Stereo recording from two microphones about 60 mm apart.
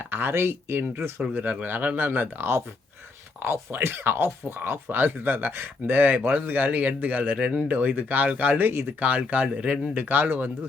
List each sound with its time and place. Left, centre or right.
0.1 s a man's voice: right
9.0 s a man's voice: right